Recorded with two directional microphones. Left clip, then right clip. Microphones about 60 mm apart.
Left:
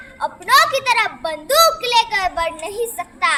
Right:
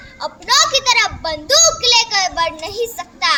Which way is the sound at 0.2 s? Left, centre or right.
Left.